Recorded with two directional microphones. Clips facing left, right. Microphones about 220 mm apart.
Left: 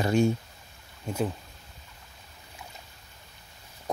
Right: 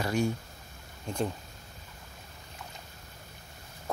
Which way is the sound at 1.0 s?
5° left (ahead or behind).